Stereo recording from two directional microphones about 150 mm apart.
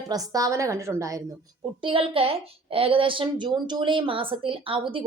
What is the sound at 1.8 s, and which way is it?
A woman's voice, 35° right (ahead or behind).